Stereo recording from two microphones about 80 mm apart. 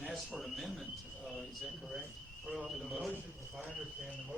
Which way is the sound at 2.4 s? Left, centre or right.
Centre.